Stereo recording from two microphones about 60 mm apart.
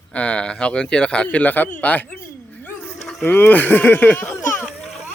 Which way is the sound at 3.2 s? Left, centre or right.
Left.